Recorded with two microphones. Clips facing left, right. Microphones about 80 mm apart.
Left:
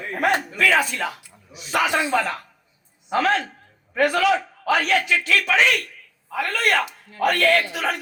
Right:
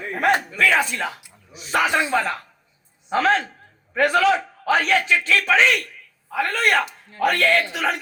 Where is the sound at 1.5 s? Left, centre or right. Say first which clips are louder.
Right 1 dB; right.